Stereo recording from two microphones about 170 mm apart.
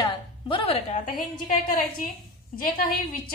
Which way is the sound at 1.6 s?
55° left (ahead or behind).